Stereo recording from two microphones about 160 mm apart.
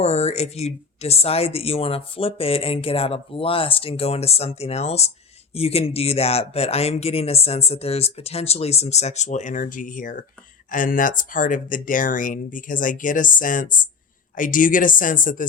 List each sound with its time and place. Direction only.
0.0 s speech: 40° left (ahead or behind); by 15.4 s 55° left (ahead or behind)